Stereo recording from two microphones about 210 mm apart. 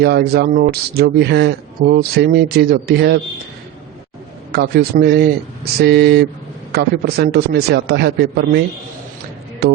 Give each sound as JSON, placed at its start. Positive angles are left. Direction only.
{"t": 0.0, "sound": "speech", "side_deg": -50}
{"t": 4.5, "sound": "speech", "side_deg": -50}